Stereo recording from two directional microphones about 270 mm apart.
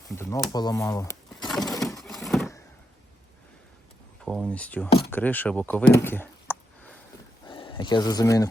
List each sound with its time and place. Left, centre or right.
0.1 s speech: centre
1.5 s a sound: centre
4.3 s speech: centre
7.4 s speech: centre